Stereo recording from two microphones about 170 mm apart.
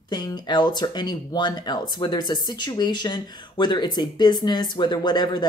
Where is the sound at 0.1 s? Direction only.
25° left (ahead or behind).